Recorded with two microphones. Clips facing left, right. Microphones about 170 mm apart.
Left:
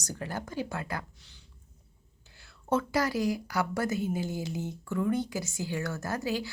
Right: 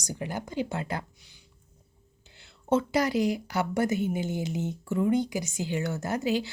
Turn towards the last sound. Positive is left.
turn(degrees=-20)  # may be behind; listen again after turning